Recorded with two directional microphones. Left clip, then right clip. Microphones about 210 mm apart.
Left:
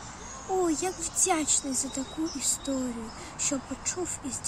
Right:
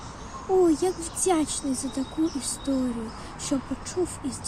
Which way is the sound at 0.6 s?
15° left (ahead or behind).